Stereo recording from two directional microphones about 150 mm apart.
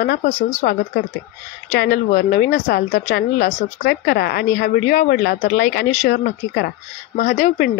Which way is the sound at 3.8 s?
90° left.